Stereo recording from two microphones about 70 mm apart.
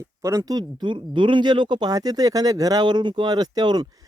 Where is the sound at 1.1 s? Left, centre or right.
Right.